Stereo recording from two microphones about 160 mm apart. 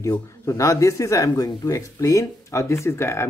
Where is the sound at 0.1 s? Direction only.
20° left (ahead or behind).